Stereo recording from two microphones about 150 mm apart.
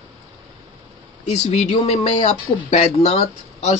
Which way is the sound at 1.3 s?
45° left (ahead or behind).